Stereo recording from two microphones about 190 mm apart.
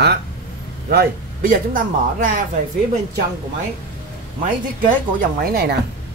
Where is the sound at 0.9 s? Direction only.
50° right (ahead or behind).